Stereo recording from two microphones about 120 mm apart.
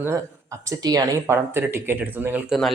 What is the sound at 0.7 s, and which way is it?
Speech, 30° right (ahead or behind).